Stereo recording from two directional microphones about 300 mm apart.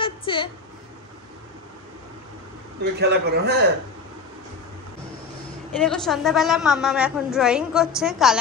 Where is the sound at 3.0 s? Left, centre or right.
Right.